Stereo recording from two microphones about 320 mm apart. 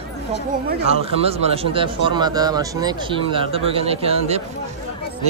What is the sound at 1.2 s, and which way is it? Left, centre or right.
Speech, centre.